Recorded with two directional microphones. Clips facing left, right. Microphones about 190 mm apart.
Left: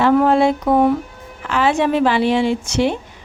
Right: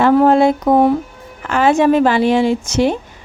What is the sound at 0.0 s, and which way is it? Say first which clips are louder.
Speech: right 3 dB; 45° right (ahead or behind).